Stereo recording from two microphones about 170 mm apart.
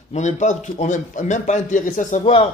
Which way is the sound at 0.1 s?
45° left (ahead or behind).